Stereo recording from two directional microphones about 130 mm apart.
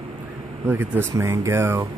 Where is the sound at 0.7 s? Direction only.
15° right (ahead or behind).